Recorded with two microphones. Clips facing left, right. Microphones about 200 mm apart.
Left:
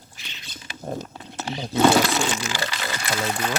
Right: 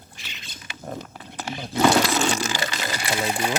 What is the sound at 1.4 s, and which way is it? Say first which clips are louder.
Speech: left 2 dB; 20° left (ahead or behind).